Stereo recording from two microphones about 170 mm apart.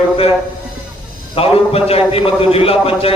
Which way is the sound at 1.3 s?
35° left (ahead or behind).